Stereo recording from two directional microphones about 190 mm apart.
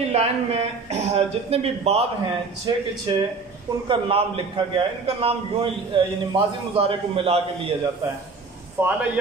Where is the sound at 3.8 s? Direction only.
30° right (ahead or behind).